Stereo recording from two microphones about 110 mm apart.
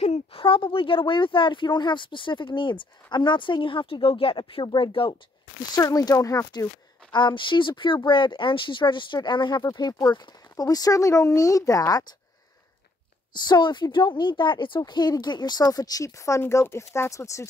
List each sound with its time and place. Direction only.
0.0 s speech: 65° left (ahead or behind); by 5.1 s 50° left (ahead or behind)
5.8 s a woman's voice: 35° left (ahead or behind)
7.1 s a woman's voice: 45° left (ahead or behind)
13.3 s a woman's voice: 40° left (ahead or behind)